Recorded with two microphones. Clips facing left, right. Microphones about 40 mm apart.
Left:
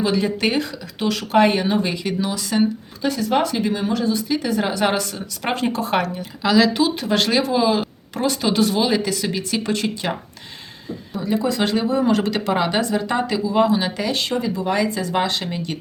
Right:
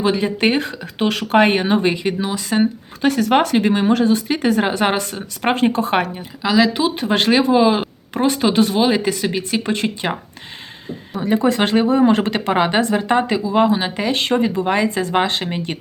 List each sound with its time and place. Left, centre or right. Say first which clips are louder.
0.0 s speech: right 3 dB; right
3.0 s speech: right 4 dB; right
6.4 s speech: right 1 dB; centre
7.0 s speech: right 3 dB; right
11.2 s speech: right 4 dB; right